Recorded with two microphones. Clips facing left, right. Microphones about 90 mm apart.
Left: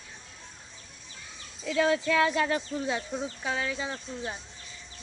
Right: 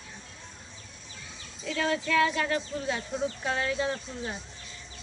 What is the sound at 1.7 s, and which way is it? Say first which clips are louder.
Speech: left 3 dB; 15° left (ahead or behind).